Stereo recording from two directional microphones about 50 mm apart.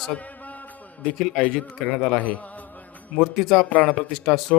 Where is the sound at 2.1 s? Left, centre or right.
Left.